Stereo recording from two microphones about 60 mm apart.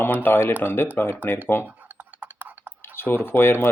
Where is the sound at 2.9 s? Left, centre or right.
Left.